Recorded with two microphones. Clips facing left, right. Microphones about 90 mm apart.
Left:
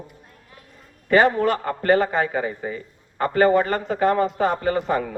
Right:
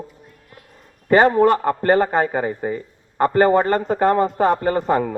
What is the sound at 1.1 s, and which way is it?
A man's voice, 40° right (ahead or behind).